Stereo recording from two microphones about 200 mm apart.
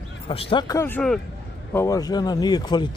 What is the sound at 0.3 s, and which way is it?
Speech, 25° left (ahead or behind).